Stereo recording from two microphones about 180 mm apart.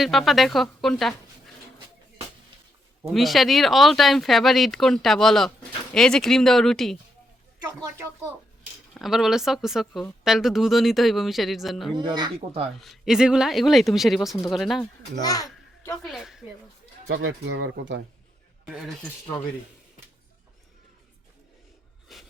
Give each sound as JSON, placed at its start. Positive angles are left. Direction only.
{"t": 0.0, "sound": "speech", "side_deg": 0}
{"t": 3.1, "sound": "speech", "side_deg": 0}
{"t": 7.7, "sound": "speech", "side_deg": -15}
{"t": 9.0, "sound": "speech", "side_deg": 0}
{"t": 11.9, "sound": "speech", "side_deg": -25}
{"t": 12.8, "sound": "speech", "side_deg": 0}
{"t": 15.2, "sound": "a child's voice", "side_deg": 20}
{"t": 16.0, "sound": "speech", "side_deg": 0}
{"t": 17.1, "sound": "speech", "side_deg": -90}
{"t": 18.6, "sound": "speech", "side_deg": -5}
{"t": 22.1, "sound": "a sound", "side_deg": 0}